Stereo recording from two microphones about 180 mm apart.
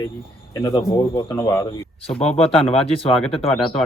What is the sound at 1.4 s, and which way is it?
Speech, 15° left (ahead or behind).